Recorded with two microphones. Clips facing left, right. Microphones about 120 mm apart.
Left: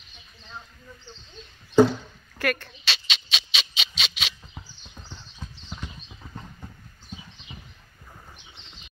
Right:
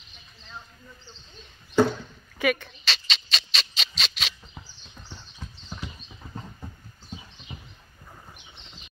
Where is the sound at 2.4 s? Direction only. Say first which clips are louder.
Right 2 dB; 5° right (ahead or behind).